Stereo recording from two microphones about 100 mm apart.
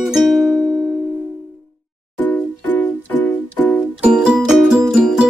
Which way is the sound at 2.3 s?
15° left (ahead or behind).